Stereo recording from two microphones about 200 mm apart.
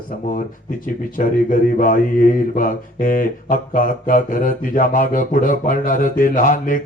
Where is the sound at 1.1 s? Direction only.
40° left (ahead or behind).